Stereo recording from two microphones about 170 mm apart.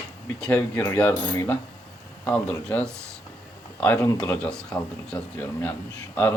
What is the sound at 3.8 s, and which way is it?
Speech, 10° left (ahead or behind).